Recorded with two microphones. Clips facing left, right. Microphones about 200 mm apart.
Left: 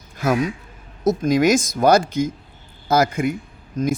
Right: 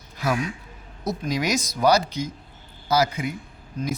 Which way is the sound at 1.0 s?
50° left (ahead or behind).